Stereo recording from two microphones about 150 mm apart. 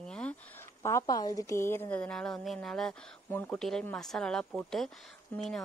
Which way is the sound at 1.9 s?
5° left (ahead or behind).